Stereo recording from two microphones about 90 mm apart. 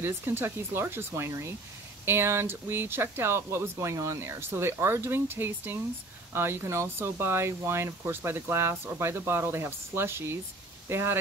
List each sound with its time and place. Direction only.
0.0 s speech: 25° right (ahead or behind)